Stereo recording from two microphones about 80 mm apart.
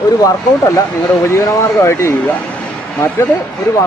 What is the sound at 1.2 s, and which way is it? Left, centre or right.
Speech, left.